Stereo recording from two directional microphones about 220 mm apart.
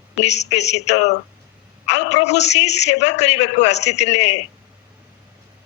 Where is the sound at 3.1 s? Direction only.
50° left (ahead or behind).